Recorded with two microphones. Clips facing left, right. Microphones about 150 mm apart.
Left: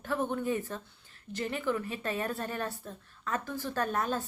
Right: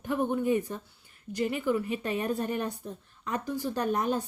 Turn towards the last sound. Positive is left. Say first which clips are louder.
# right 3 dB
turn(degrees=-15)  # may be behind; listen again after turning